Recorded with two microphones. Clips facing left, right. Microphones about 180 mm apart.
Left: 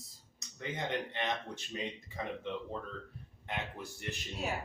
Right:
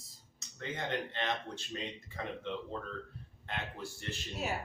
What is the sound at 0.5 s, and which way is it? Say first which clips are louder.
Speech: left 1 dB; 15° left (ahead or behind).